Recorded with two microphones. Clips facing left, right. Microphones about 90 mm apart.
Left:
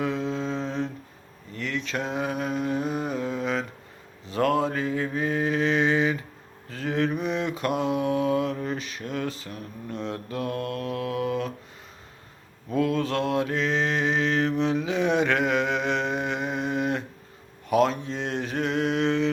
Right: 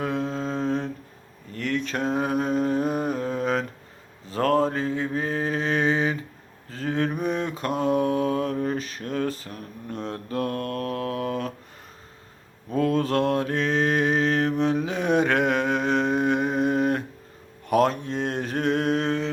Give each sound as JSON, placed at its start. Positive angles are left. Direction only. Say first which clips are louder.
{"t": 0.0, "sound": "humming", "louder": "even", "side_deg": -45}
{"t": 1.5, "sound": "mantra", "louder": "right 3 dB", "side_deg": -50}
{"t": 12.7, "sound": "mantra", "louder": "right 2 dB", "side_deg": -45}